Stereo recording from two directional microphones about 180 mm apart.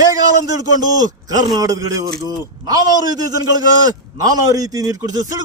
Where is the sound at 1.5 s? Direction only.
20° right (ahead or behind).